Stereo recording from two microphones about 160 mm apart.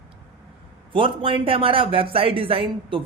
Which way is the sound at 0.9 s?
35° right (ahead or behind).